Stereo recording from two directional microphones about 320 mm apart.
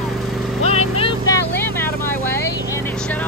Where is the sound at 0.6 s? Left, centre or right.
Centre.